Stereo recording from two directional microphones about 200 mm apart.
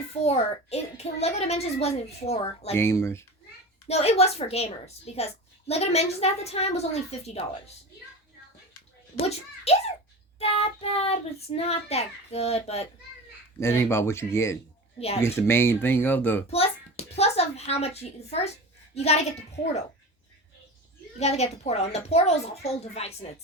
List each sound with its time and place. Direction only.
0.3 s a woman's voice: 30° left (ahead or behind)
2.7 s speech: 15° left (ahead or behind)
3.8 s a woman's voice: 30° left (ahead or behind)
9.1 s a child's voice: 30° left (ahead or behind)
13.6 s speech: 15° left (ahead or behind)
14.9 s speech: 30° left (ahead or behind)
15.2 s speech: 10° left (ahead or behind)
16.5 s a woman's voice: 30° left (ahead or behind)
21.2 s a woman's voice: 30° left (ahead or behind)